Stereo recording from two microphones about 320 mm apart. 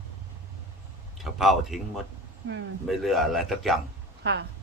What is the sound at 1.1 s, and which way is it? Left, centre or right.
A man's voice, centre.